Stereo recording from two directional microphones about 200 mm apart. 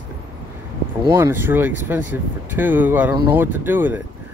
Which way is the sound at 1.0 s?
10° right (ahead or behind).